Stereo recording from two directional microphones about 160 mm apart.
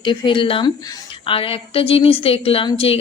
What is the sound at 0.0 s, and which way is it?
A woman's voice, 30° left (ahead or behind).